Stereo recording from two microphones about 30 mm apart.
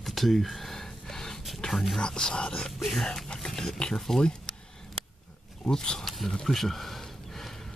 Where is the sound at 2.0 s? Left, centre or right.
Left.